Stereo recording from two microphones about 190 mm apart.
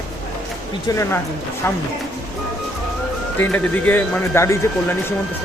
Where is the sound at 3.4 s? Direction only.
10° left (ahead or behind).